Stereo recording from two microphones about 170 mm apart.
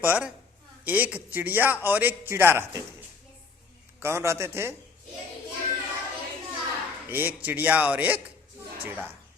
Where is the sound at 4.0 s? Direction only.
15° right (ahead or behind).